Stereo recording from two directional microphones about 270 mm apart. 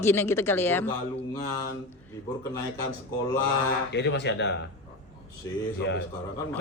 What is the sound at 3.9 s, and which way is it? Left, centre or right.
Speech, left.